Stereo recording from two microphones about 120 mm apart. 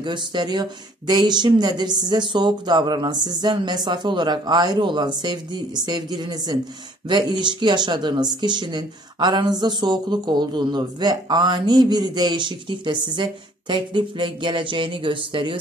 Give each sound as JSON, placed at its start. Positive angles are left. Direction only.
{"t": 0.0, "sound": "speech", "side_deg": -40}